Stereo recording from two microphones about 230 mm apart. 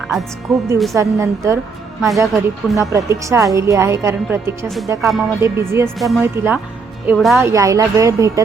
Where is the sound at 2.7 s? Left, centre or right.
Centre.